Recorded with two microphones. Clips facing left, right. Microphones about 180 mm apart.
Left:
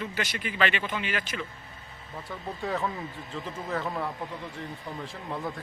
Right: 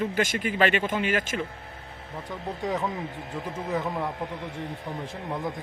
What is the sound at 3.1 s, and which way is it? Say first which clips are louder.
Speech: right 4 dB; 65° right (ahead or behind).